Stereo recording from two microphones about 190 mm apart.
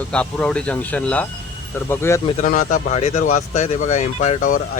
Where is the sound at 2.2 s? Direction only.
40° left (ahead or behind).